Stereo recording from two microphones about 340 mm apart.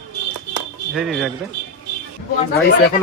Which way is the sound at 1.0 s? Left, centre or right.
Centre.